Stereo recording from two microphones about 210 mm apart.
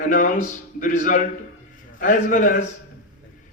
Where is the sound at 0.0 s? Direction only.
40° left (ahead or behind).